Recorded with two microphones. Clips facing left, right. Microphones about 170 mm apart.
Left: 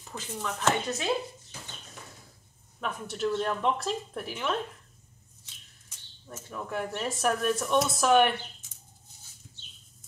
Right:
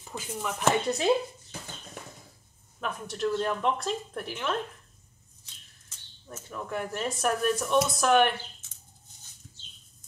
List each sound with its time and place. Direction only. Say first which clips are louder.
0.0 s speech: right 1 dB; 10° right (ahead or behind)
2.8 s speech: even; centre (ahead or behind)
6.5 s speech: even; centre (ahead or behind)